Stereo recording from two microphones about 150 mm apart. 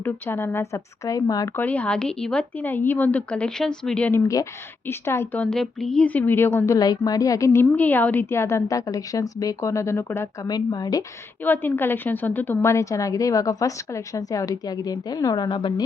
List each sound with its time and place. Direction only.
0.0 s a woman's voice: 15° left (ahead or behind)
1.6 s a woman's voice: 10° left (ahead or behind)
4.2 s a woman's voice: 20° left (ahead or behind)
6.7 s a woman's voice: 25° left (ahead or behind)
11.4 s a woman's voice: 15° left (ahead or behind); by 15.7 s 30° left (ahead or behind)